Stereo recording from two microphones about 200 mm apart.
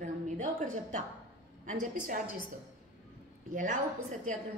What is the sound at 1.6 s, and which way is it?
Speech, 40° right (ahead or behind).